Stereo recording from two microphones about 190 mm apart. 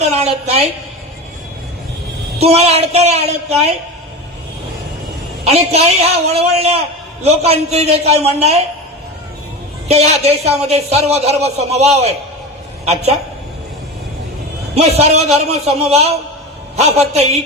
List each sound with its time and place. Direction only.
0.0 s a woman's voice: 35° right (ahead or behind)
2.4 s a man's voice: 35° right (ahead or behind)
5.5 s a man's voice: 35° right (ahead or behind)
9.9 s a man's voice: 35° right (ahead or behind)
14.8 s a man's voice: 35° right (ahead or behind)